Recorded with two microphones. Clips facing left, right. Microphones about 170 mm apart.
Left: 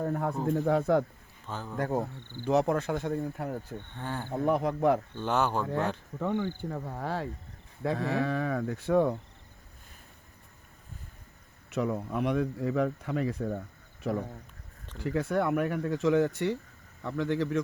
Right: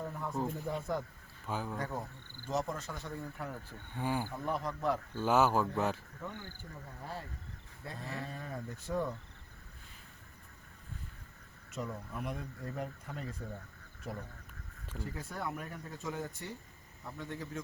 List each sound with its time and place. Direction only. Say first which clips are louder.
0.0 s speech: left 10 dB; 60° left (ahead or behind)
0.5 s speech: left 11 dB; 75° left (ahead or behind)
1.5 s speech: right 1 dB; 10° right (ahead or behind)
1.8 s speech: left 9 dB; 50° left (ahead or behind)
2.4 s speech: left 10 dB; 65° left (ahead or behind); by 3.6 s 45° left (ahead or behind)
3.9 s speech: right 3 dB; 10° right (ahead or behind)
4.4 s speech: left 10 dB; 60° left (ahead or behind)
5.1 s speech: even; 5° right (ahead or behind)
6.1 s speech: left 14 dB; 80° left
11.7 s speech: left 11 dB; 75° left (ahead or behind); by 17.6 s 90° left